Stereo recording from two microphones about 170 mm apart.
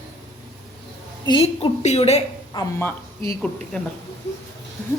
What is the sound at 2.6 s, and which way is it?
Speech, 25° left (ahead or behind).